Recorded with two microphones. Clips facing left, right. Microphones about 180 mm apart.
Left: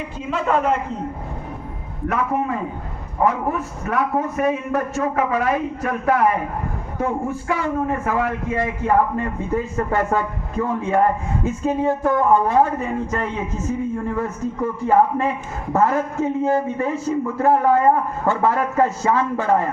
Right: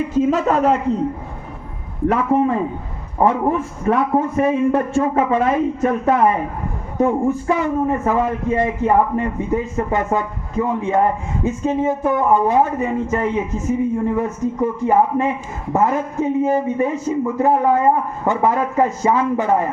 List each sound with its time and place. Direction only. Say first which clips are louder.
0.1 s a man's voice: right 4 dB; 40° right (ahead or behind)
2.3 s a man's voice: right 6 dB; 30° right (ahead or behind)